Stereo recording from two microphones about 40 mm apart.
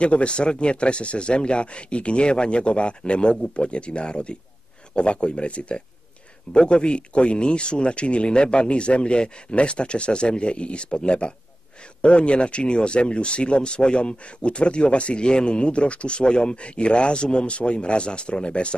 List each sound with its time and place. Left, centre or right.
0.0 s speech: left